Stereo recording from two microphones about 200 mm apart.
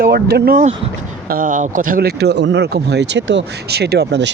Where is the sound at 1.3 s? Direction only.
40° right (ahead or behind).